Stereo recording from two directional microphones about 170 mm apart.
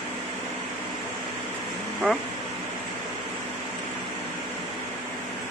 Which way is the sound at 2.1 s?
5° left (ahead or behind).